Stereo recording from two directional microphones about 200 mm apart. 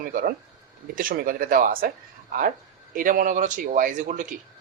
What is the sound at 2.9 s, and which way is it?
Speech, 45° right (ahead or behind).